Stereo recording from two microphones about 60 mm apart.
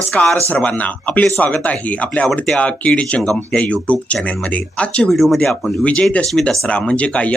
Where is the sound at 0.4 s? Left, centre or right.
Left.